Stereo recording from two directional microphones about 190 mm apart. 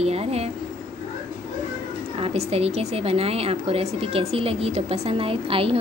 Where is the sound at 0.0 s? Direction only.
35° right (ahead or behind).